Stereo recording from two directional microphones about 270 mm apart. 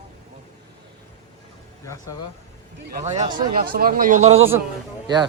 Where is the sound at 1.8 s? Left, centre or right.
Centre.